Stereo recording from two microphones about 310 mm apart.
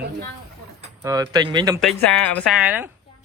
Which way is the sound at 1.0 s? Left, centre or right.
Centre.